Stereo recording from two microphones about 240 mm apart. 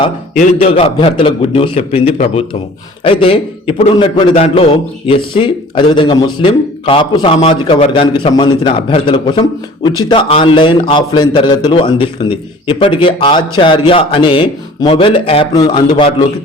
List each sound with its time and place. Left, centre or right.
0.3 s a man's voice: left